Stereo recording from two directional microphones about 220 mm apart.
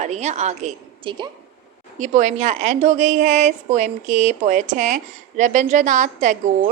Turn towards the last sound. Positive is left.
turn(degrees=-35)  # may be behind; listen again after turning